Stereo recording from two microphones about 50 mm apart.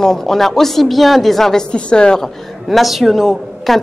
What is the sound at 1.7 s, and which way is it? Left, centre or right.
Speech, centre.